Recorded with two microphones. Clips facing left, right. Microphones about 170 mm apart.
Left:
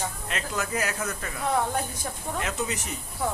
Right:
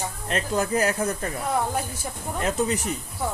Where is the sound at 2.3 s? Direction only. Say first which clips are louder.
Right 7 dB; 35° right (ahead or behind).